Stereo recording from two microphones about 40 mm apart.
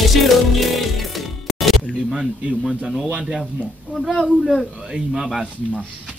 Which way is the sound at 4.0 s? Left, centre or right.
Centre.